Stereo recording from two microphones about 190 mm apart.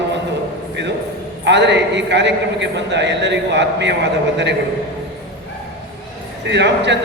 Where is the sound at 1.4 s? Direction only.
65° right (ahead or behind).